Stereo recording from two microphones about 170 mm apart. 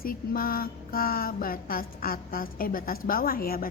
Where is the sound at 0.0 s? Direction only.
60° left (ahead or behind).